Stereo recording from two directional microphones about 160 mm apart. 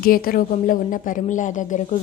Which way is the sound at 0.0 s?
65° left (ahead or behind).